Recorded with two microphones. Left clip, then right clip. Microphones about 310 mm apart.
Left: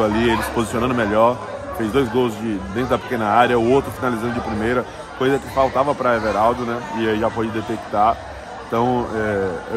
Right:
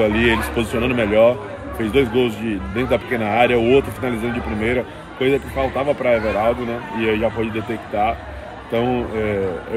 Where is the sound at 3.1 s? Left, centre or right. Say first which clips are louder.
Left 2 dB; left.